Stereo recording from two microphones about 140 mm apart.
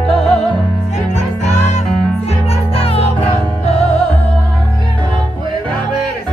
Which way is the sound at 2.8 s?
45° left (ahead or behind).